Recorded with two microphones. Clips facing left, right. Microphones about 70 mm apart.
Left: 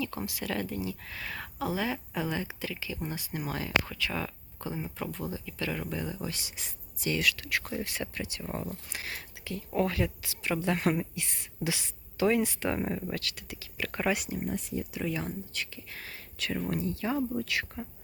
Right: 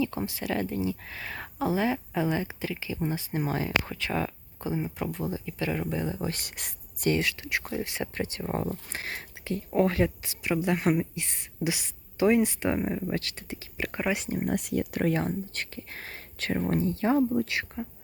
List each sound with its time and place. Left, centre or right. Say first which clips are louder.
0.0 s speech: right 5 dB; right
4.7 s speech: right 5 dB; centre
6.2 s speech: right 4 dB; right
7.1 s speech: right 3 dB; right
7.6 s speech: right 3 dB; centre
7.9 s speech: right 3 dB; right
8.1 s speech: right 6 dB; right
10.4 s speech: right 3 dB; centre
12.8 s speech: right 2 dB; centre
13.1 s speech: right 4 dB; right
14.3 s speech: right 5 dB; right
14.5 s speech: right 6 dB; right